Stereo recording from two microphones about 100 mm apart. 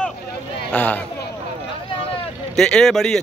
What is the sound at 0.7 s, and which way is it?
Speech, 15° left (ahead or behind).